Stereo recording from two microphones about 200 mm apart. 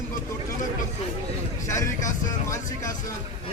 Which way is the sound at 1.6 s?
15° left (ahead or behind).